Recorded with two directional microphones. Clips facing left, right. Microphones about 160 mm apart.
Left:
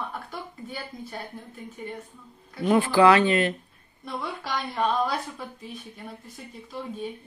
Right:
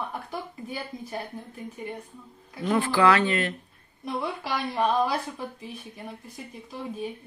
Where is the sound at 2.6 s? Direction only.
20° left (ahead or behind).